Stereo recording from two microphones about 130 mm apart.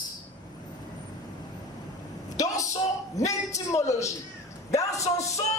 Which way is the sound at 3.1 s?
25° left (ahead or behind).